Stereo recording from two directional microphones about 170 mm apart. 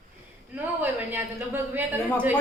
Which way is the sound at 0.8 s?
10° right (ahead or behind).